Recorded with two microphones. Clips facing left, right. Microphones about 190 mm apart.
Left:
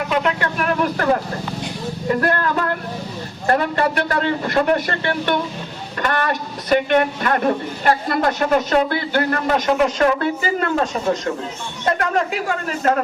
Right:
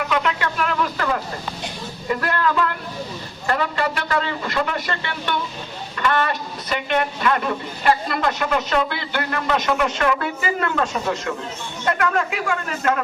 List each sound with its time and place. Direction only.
0.4 s vehicle: 50° left (ahead or behind)
2.2 s a woman's voice: 50° left (ahead or behind); by 13.0 s 35° left (ahead or behind)